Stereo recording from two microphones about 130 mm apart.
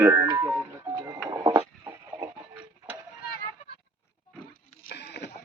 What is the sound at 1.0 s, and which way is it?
Printer, 25° right (ahead or behind).